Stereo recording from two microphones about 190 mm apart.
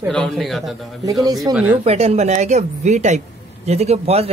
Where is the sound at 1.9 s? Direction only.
35° right (ahead or behind).